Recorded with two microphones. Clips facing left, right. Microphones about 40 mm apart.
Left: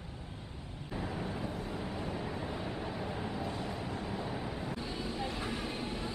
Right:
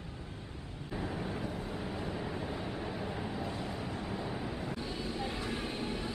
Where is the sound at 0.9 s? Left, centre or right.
Centre.